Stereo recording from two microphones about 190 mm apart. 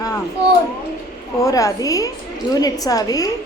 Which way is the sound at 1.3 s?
15° left (ahead or behind).